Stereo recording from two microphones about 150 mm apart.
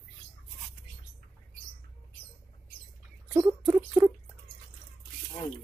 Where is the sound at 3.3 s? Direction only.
20° right (ahead or behind).